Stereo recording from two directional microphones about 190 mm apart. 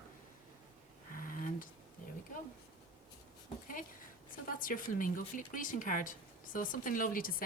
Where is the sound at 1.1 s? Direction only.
50° left (ahead or behind).